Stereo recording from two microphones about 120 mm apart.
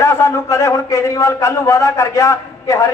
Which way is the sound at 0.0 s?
25° left (ahead or behind).